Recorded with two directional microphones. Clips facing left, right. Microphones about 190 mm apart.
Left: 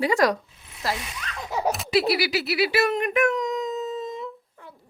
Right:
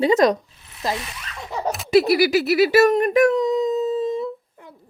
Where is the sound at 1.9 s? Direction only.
45° right (ahead or behind).